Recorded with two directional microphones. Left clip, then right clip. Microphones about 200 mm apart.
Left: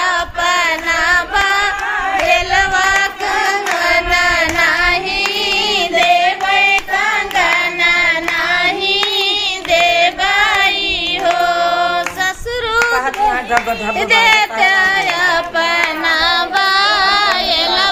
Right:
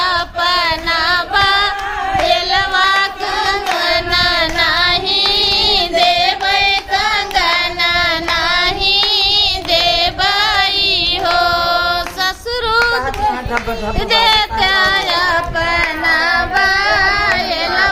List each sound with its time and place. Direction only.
0.0 s music: 5° left (ahead or behind)
2.3 s carnatic music: 10° left (ahead or behind)
5.1 s music: 35° left (ahead or behind)
8.4 s child singing: 5° right (ahead or behind)
11.3 s a sound: 5° right (ahead or behind)
14.1 s music: centre (ahead or behind)
16.6 s carnatic music: 5° left (ahead or behind)